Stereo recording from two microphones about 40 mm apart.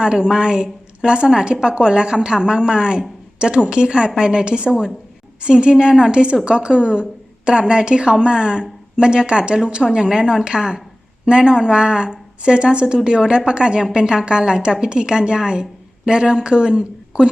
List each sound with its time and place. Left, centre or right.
0.0 s a woman's voice: right